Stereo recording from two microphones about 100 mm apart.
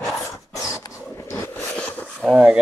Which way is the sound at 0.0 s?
30° left (ahead or behind).